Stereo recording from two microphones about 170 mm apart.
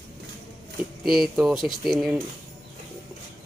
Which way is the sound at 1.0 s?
Centre (ahead or behind).